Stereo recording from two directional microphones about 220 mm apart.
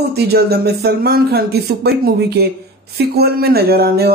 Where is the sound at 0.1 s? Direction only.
45° right (ahead or behind).